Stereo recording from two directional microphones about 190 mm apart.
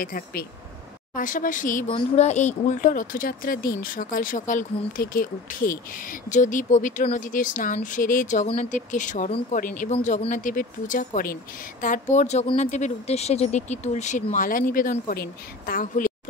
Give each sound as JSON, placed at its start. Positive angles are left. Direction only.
{"t": 0.0, "sound": "speech", "side_deg": 50}
{"t": 1.9, "sound": "speech", "side_deg": 30}